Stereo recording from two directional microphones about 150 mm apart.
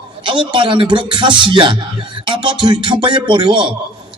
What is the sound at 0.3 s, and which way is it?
A man's voice, 35° right (ahead or behind).